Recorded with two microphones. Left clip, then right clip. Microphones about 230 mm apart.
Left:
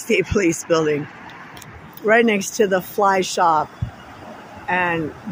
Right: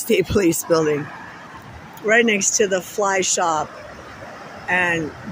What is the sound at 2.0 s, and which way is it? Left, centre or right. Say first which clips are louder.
Speech: even; centre.